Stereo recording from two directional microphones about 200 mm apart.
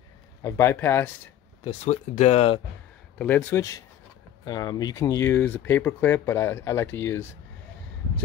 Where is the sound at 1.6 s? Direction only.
30° left (ahead or behind).